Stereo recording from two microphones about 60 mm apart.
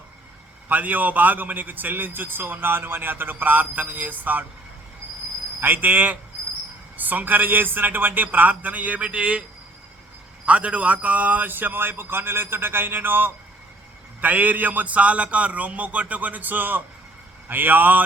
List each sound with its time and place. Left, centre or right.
0.7 s a man's voice: right
5.5 s a man's voice: right
10.4 s a man's voice: right